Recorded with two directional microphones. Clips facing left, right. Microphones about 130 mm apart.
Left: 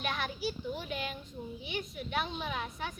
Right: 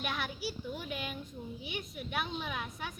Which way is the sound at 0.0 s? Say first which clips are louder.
Left 2 dB; 10° right (ahead or behind).